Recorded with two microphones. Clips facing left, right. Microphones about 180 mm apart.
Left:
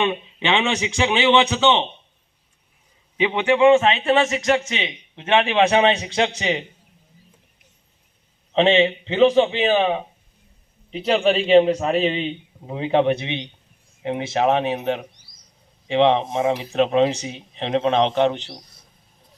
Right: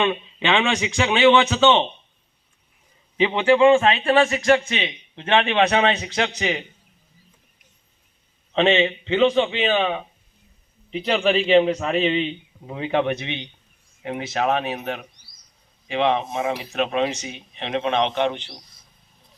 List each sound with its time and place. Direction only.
0.0 s a man's voice: 15° left (ahead or behind)
3.2 s a man's voice: 15° left (ahead or behind)
8.5 s a man's voice: 30° left (ahead or behind)